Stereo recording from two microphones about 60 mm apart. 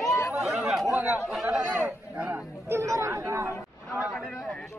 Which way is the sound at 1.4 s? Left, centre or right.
Centre.